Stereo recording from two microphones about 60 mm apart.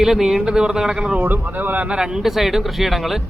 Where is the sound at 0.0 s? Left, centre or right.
Centre.